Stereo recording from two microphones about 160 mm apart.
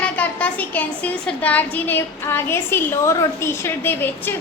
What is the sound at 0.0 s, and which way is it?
Speech, 10° left (ahead or behind).